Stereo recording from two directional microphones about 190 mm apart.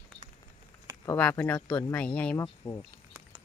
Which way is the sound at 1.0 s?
10° left (ahead or behind).